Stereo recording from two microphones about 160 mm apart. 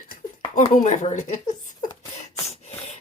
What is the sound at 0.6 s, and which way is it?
Speech, 50° left (ahead or behind).